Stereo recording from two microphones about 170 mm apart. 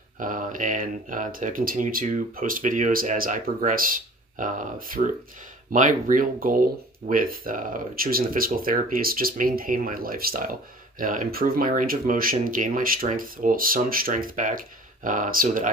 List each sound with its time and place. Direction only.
0.2 s speech: 55° right (ahead or behind)